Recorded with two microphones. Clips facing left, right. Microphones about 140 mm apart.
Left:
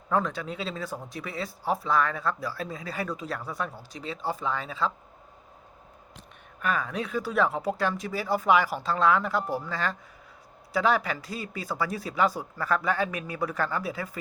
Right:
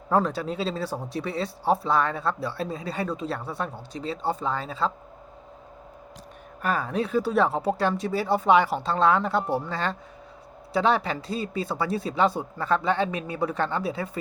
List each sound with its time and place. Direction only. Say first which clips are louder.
0.1 s speech: right 4 dB; 35° right (ahead or behind)
6.6 s speech: right 3 dB; 35° right (ahead or behind)